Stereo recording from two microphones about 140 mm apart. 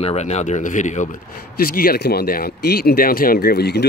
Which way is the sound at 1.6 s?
90° left.